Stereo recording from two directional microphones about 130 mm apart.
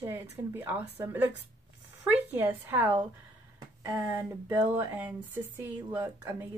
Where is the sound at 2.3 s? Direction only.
15° right (ahead or behind).